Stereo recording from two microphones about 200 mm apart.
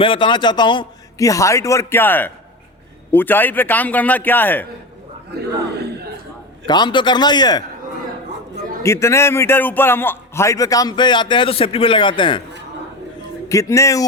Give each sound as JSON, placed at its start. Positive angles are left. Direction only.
{"t": 0.0, "sound": "a man's voice", "side_deg": 25}
{"t": 6.7, "sound": "a man's voice", "side_deg": 20}
{"t": 8.8, "sound": "a man's voice", "side_deg": 15}
{"t": 13.5, "sound": "a man's voice", "side_deg": 15}